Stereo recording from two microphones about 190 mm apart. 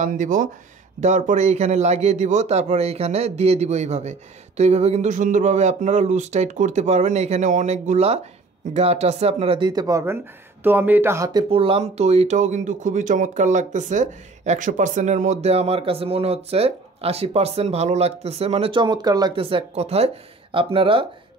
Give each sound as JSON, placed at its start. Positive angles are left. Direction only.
{"t": 0.0, "sound": "speech", "side_deg": -40}
{"t": 11.5, "sound": "speech", "side_deg": -30}